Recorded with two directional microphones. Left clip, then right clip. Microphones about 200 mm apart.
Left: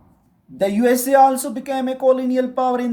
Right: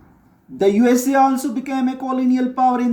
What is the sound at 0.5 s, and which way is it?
A man's voice, 45° left (ahead or behind).